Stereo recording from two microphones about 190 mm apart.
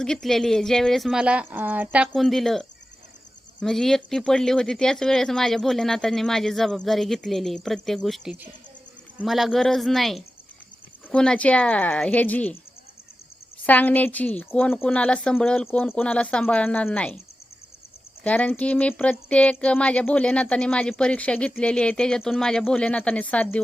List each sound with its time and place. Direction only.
0.0 s speech: centre (ahead or behind)
13.7 s speech: 10° left (ahead or behind)
18.2 s speech: 10° left (ahead or behind)